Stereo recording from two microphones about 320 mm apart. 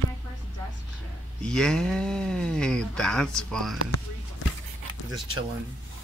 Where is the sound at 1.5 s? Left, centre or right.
Centre.